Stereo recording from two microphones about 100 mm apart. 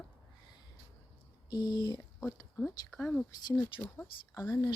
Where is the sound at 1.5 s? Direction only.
45° left (ahead or behind).